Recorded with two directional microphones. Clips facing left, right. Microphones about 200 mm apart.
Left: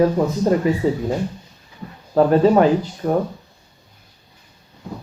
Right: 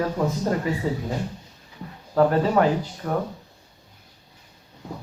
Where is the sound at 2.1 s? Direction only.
25° left (ahead or behind).